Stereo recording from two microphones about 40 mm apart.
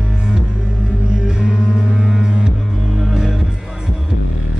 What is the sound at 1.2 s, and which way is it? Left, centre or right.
Music, centre.